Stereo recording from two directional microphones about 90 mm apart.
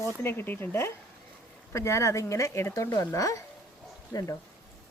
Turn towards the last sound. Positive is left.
turn(degrees=40)  # may be behind; listen again after turning